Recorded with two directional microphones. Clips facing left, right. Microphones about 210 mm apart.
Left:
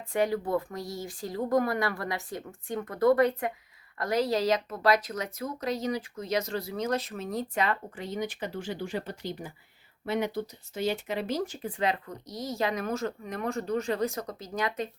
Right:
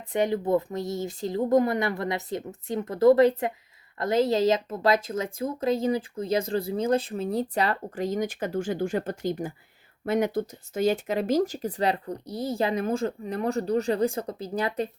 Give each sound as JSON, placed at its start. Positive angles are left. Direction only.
{"t": 0.1, "sound": "speech", "side_deg": -20}